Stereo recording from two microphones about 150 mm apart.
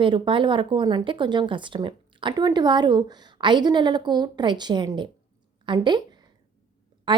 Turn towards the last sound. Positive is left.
turn(degrees=-30)  # may be behind; listen again after turning